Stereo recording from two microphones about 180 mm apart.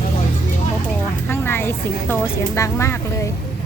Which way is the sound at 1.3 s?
15° left (ahead or behind).